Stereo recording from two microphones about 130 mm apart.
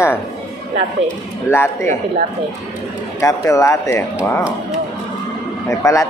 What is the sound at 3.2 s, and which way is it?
Speech, 25° left (ahead or behind).